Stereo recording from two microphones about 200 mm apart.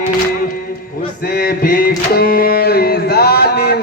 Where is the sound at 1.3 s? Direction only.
50° left (ahead or behind).